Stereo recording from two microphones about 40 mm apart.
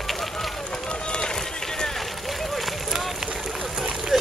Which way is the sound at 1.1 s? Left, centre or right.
Centre.